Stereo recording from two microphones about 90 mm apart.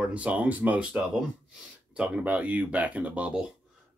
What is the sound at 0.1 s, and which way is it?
Speech, 15° right (ahead or behind).